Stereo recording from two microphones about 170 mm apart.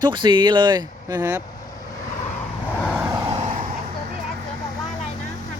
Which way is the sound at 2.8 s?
5° right (ahead or behind).